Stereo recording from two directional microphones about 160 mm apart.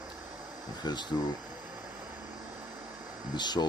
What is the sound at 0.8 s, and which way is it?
Speech, 25° left (ahead or behind).